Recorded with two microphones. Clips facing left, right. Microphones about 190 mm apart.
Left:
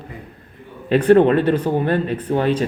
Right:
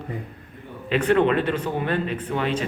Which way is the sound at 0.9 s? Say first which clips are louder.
Left 7 dB; 40° left (ahead or behind).